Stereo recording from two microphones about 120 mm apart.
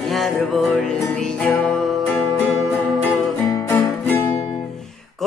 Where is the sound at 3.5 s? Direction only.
25° left (ahead or behind).